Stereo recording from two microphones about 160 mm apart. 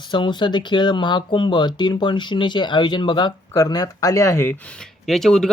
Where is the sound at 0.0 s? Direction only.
30° left (ahead or behind).